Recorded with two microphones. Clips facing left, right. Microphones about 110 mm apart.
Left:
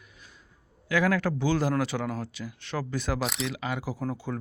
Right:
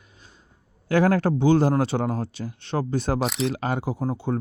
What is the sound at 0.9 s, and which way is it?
Speech, 35° right (ahead or behind).